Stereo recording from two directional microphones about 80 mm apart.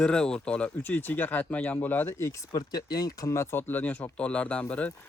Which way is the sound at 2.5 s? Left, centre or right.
Left.